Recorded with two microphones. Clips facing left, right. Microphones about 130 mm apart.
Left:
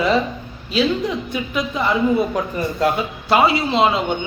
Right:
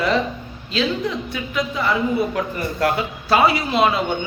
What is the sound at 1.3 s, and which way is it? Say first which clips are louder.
Speech: left 1 dB; 20° left (ahead or behind).